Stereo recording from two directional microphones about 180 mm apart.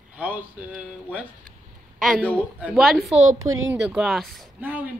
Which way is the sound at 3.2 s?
90° right.